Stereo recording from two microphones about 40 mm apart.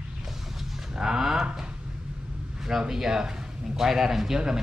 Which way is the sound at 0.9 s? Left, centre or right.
Centre.